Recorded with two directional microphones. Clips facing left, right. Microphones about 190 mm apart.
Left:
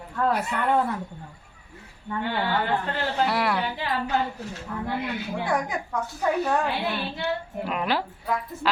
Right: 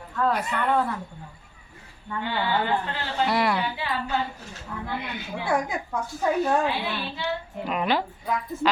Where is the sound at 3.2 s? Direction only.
5° left (ahead or behind).